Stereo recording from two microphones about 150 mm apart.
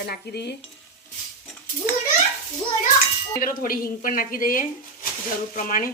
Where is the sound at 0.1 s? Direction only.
90° left.